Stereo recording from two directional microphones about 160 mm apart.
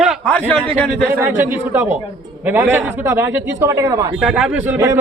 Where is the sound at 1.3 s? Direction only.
15° right (ahead or behind).